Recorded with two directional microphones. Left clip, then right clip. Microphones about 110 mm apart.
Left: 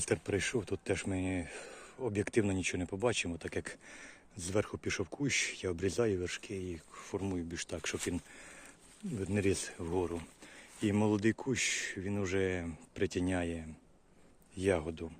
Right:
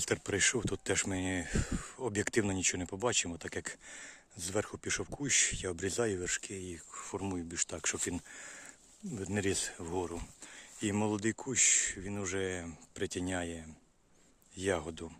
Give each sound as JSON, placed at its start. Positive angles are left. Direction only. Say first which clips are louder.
{"t": 0.0, "sound": "speech", "louder": "right 2 dB", "side_deg": -35}